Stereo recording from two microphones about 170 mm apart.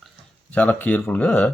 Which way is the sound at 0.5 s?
10° left (ahead or behind).